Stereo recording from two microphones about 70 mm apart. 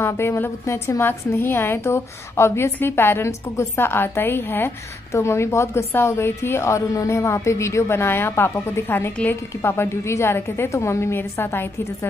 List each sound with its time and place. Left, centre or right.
0.0 s a woman's voice: left
5.1 s a woman's voice: left